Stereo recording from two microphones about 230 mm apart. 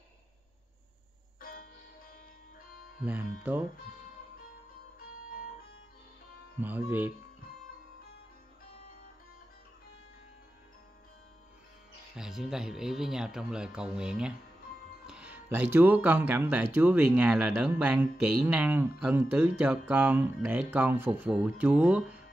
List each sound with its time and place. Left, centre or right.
1.4 s music: left
3.0 s speech: centre
5.1 s music: left
6.6 s speech: centre
12.2 s speech: centre